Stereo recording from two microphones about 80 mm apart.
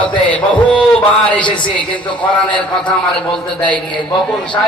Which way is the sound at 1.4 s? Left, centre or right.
Left.